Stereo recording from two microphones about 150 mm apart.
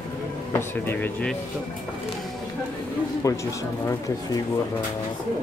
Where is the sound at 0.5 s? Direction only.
15° left (ahead or behind).